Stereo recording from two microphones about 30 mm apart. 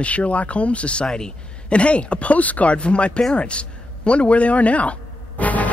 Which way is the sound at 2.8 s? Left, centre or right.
Left.